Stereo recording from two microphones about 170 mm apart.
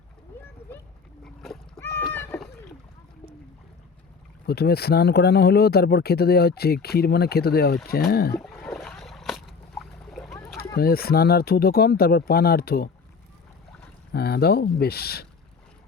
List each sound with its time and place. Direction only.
1.2 s dog: 5° left (ahead or behind)
1.8 s rowboat: 15° left (ahead or behind)
4.4 s speech: 70° left (ahead or behind)
8.4 s a sound: 5° left (ahead or behind)
10.8 s speech: 65° left (ahead or behind)
14.1 s speech: 70° left (ahead or behind)